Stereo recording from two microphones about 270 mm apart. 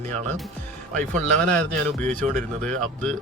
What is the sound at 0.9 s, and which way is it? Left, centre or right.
A man's voice, centre.